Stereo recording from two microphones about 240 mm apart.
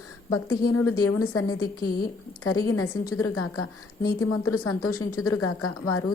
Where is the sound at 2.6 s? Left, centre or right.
Left.